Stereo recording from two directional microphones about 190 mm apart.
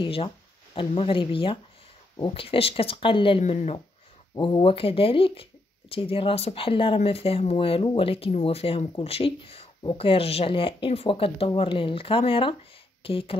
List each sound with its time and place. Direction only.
0.0 s speech: 30° left (ahead or behind)